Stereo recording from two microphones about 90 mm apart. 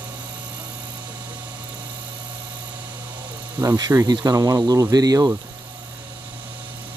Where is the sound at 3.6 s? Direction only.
45° right (ahead or behind).